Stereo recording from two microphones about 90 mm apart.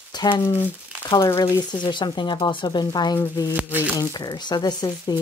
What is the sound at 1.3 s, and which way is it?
Speech, 55° left (ahead or behind).